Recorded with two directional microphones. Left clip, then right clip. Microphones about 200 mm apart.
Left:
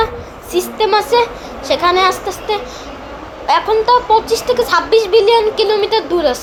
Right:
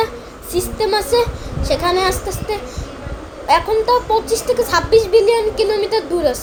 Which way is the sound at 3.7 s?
5° left (ahead or behind).